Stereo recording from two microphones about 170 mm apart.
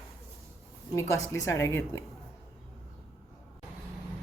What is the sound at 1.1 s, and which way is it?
Speech, 15° left (ahead or behind).